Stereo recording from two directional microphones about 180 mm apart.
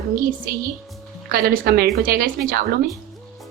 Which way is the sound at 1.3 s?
55° right (ahead or behind).